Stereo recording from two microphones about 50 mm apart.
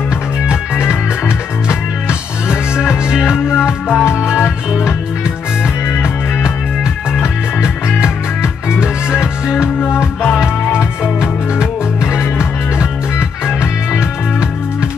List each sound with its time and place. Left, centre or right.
1.7 s music: left
3.1 s music: centre
3.9 s music: left
6.8 s music: centre
10.8 s music: centre